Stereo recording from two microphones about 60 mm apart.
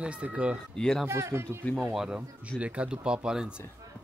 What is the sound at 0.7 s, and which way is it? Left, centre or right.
Speech, centre.